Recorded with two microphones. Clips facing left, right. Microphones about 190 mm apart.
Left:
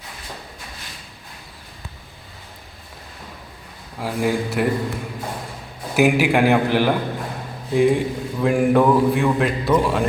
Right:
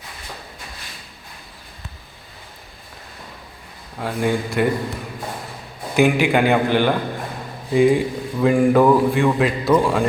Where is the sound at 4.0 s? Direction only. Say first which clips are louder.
Even; 5° left (ahead or behind).